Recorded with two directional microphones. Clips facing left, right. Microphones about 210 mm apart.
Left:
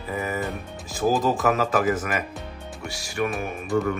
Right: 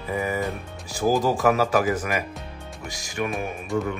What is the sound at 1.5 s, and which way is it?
Speech, 10° right (ahead or behind).